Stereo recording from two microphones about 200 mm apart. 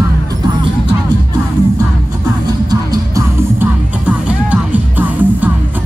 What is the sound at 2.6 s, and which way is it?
Music, 20° right (ahead or behind).